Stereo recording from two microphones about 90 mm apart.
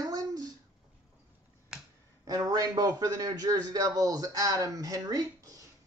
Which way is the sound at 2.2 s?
45° right (ahead or behind).